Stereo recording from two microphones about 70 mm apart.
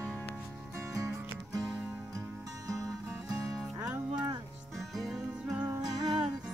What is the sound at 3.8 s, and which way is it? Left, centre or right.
Music, centre.